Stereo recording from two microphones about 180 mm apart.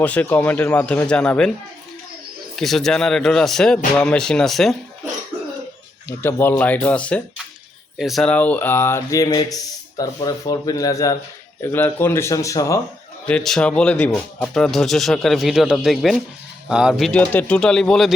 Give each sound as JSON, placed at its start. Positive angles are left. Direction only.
{"t": 0.0, "sound": "speech", "side_deg": 10}
{"t": 2.6, "sound": "speech", "side_deg": 0}
{"t": 6.1, "sound": "speech", "side_deg": 10}
{"t": 13.2, "sound": "speech", "side_deg": 5}